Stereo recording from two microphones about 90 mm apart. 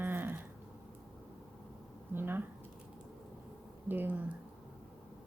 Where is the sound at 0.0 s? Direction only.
25° right (ahead or behind).